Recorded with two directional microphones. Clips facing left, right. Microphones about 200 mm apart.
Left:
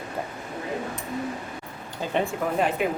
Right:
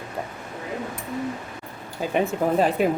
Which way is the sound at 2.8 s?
35° right (ahead or behind).